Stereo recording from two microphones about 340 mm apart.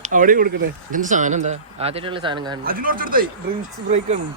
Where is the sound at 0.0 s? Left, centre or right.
Right.